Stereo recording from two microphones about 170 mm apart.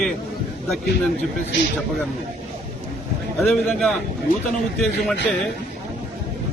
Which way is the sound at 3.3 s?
Centre (ahead or behind).